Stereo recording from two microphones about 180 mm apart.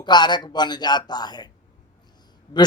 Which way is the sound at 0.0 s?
25° left (ahead or behind).